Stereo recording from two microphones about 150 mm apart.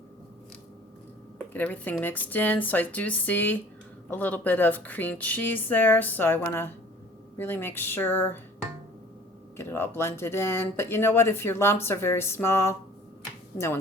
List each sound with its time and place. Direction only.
1.5 s speech: 10° left (ahead or behind)
9.6 s speech: 15° left (ahead or behind)